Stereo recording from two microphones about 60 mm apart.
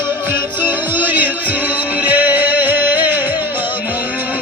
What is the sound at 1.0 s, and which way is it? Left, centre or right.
Music, right.